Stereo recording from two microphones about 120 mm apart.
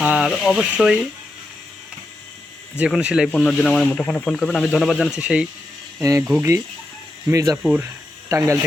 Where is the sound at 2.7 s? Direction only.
10° right (ahead or behind).